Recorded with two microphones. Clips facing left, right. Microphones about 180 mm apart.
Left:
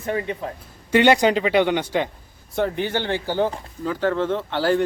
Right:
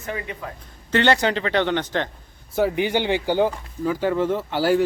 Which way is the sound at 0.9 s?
15° left (ahead or behind).